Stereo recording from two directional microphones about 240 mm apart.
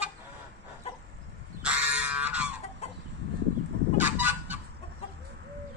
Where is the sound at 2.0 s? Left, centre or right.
Centre.